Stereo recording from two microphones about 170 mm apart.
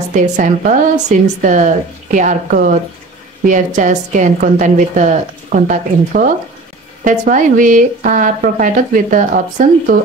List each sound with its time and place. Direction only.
0.1 s a woman's voice: 50° right (ahead or behind)